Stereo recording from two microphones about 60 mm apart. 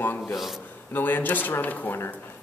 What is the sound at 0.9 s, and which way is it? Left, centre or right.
Speech, left.